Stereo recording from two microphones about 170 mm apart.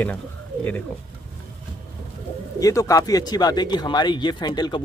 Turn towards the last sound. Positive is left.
turn(degrees=25)  # may be behind; listen again after turning